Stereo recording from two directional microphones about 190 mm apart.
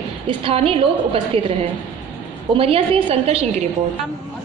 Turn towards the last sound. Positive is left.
turn(degrees=-30)  # may be behind; listen again after turning